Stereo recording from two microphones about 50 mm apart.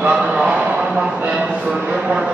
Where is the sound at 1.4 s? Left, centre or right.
Centre.